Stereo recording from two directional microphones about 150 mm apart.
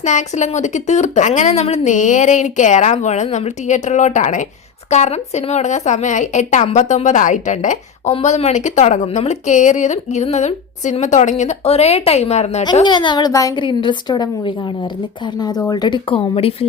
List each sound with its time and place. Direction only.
0.0 s speech: 50° left (ahead or behind)
12.8 s a woman's voice: 30° left (ahead or behind)